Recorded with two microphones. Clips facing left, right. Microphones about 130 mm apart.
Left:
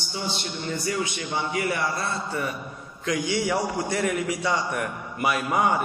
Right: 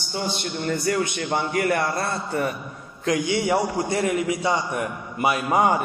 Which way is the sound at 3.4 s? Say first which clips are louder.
Right 3 dB; 30° right (ahead or behind).